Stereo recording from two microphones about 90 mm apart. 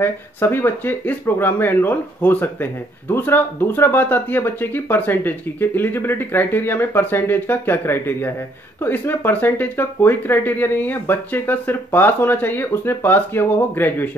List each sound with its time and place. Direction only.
0.0 s speech: 25° left (ahead or behind)